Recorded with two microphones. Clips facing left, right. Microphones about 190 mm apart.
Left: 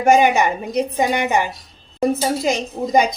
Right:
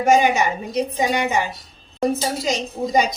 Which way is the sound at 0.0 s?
60° left (ahead or behind).